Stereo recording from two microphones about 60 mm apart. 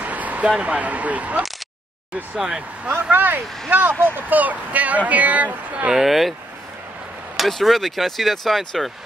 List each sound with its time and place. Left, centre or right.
0.0 s a sound: right
0.5 s speech: right
2.3 s speech: centre
2.9 s speech: right
5.9 s speech: centre
7.3 s speech: centre